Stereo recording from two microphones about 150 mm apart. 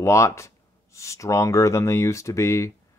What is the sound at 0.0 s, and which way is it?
Speech, 20° left (ahead or behind).